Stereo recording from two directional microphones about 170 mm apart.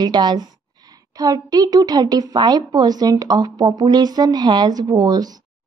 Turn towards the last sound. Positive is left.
turn(degrees=-25)  # may be behind; listen again after turning